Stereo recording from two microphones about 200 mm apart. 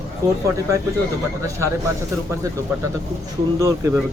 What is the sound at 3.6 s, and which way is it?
Speech, 15° right (ahead or behind).